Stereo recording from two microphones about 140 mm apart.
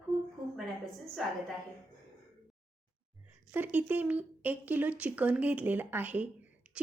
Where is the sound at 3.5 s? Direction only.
10° right (ahead or behind).